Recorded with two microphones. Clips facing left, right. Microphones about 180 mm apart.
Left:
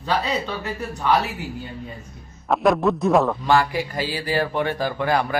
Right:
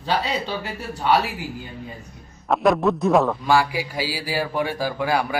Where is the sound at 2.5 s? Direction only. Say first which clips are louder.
Even; centre (ahead or behind).